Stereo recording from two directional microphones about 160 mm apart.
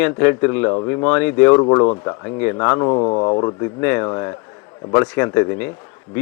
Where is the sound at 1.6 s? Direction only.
25° left (ahead or behind).